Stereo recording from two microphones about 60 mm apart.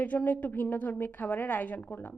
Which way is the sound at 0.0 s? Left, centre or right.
Left.